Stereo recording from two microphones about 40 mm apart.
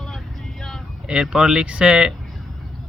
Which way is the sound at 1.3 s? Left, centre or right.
Centre.